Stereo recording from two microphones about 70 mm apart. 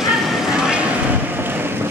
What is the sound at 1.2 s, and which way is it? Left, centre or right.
Vehicle, right.